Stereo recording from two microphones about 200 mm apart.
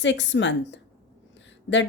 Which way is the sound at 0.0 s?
65° left (ahead or behind).